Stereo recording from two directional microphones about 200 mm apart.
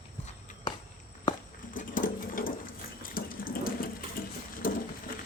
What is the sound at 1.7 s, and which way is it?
Water, 45° left (ahead or behind).